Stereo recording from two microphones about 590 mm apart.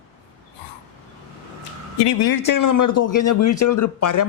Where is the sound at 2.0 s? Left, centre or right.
Left.